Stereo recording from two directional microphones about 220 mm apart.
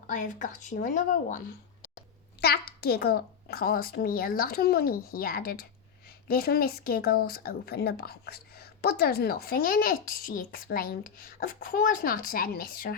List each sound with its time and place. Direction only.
0.1 s speech: 35° left (ahead or behind)
2.4 s speech: 45° left (ahead or behind)